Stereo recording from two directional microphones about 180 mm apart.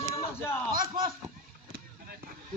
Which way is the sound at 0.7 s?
50° right (ahead or behind).